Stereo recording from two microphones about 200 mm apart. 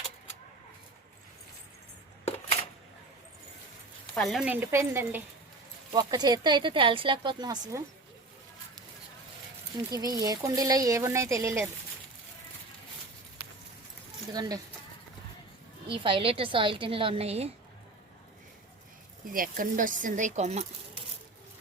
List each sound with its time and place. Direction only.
2.2 s a sound: 30° left (ahead or behind)
4.1 s speech: centre (ahead or behind); by 7.6 s 20° right (ahead or behind)
9.9 s speech: 20° right (ahead or behind)
14.3 s speech: 20° right (ahead or behind)
15.9 s speech: 25° right (ahead or behind)
19.3 s speech: 45° right (ahead or behind)